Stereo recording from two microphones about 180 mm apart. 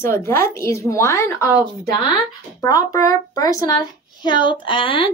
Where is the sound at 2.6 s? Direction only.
20° left (ahead or behind).